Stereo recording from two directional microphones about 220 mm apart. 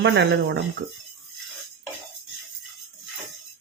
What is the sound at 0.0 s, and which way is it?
Speech, 50° right (ahead or behind).